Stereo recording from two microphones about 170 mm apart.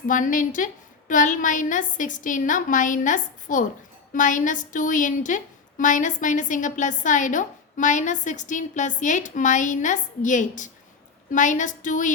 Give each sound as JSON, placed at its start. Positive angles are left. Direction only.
{"t": 0.1, "sound": "a woman's voice", "side_deg": 50}